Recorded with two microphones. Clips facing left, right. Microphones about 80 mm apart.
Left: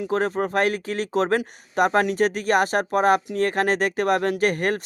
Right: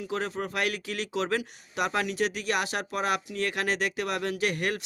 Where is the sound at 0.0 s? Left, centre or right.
Left.